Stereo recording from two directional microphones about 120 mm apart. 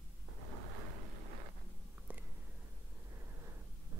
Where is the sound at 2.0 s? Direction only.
10° right (ahead or behind).